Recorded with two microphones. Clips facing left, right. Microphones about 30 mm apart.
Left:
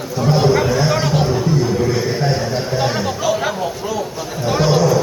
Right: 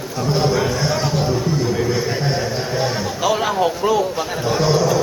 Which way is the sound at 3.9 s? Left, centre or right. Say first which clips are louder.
Right 4 dB; right.